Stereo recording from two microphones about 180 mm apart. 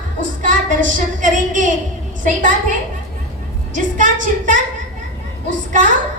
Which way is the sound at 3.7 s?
45° right (ahead or behind).